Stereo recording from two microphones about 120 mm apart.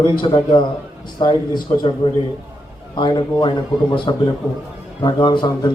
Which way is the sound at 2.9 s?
40° left (ahead or behind).